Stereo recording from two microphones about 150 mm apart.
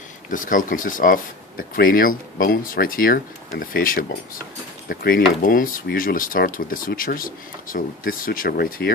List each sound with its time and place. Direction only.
0.3 s speech: 60° left (ahead or behind); by 8.9 s 80° left